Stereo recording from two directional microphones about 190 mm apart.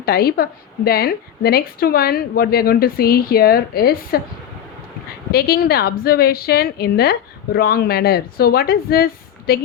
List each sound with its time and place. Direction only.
0.0 s a woman's voice: 55° left (ahead or behind)
5.3 s a woman's voice: 55° left (ahead or behind)